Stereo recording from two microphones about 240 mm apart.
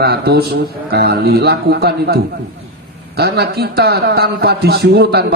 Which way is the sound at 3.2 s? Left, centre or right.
Right.